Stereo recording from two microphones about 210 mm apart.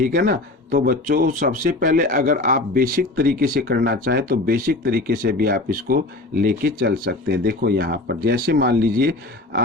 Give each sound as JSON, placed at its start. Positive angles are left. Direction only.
{"t": 0.0, "sound": "speech", "side_deg": -40}